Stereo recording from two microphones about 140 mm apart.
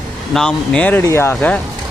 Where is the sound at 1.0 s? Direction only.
20° left (ahead or behind).